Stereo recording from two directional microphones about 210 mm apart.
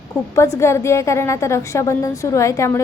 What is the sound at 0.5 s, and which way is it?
A woman's voice, 15° left (ahead or behind).